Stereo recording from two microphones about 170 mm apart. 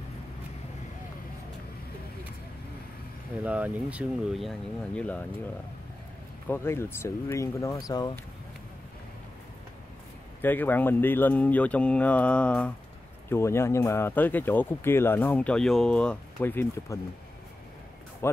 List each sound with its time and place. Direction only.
3.4 s speech: 10° right (ahead or behind); by 5.2 s 5° left (ahead or behind)
6.4 s speech: 15° left (ahead or behind)
10.4 s speech: 10° left (ahead or behind)
18.2 s music: 15° left (ahead or behind)